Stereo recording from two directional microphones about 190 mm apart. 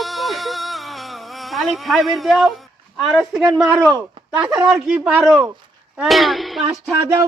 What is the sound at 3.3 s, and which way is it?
Speech, centre (ahead or behind).